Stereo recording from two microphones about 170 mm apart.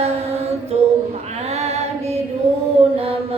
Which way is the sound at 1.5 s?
40° right (ahead or behind).